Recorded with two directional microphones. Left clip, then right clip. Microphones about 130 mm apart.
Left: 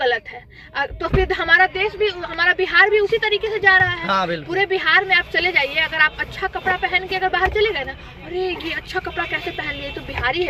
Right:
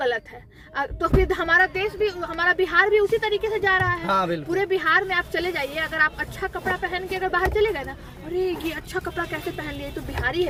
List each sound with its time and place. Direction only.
0.8 s speech: 40° right (ahead or behind)
4.0 s speech: 5° left (ahead or behind)
4.4 s speech: 35° right (ahead or behind)